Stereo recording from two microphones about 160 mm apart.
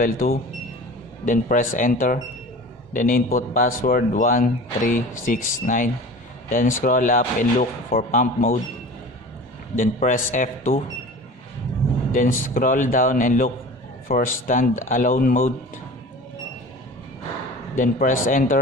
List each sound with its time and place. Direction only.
1.2 s speech: 55° left (ahead or behind)
9.8 s speech: 55° left (ahead or behind)
12.1 s speech: 60° left (ahead or behind)
17.7 s speech: 55° left (ahead or behind)